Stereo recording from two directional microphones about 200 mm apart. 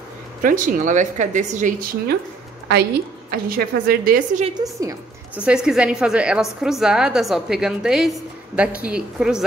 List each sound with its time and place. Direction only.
0.4 s speech: 40° right (ahead or behind)
3.3 s a woman's voice: 45° right (ahead or behind)
4.6 s a woman's voice: 15° right (ahead or behind)
5.4 s a woman's voice: 5° right (ahead or behind)